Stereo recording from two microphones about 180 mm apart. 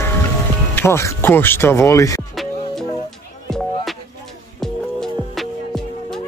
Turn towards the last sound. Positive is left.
turn(degrees=0)  # may be behind; listen again after turning